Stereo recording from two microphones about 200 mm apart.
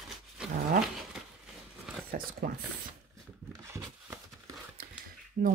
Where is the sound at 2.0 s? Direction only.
45° right (ahead or behind).